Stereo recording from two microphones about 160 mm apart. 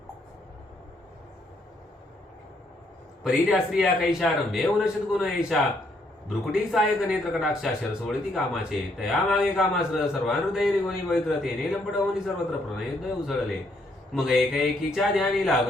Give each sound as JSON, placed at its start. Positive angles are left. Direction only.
{"t": 3.2, "sound": "speech", "side_deg": -5}
{"t": 14.1, "sound": "speech", "side_deg": -5}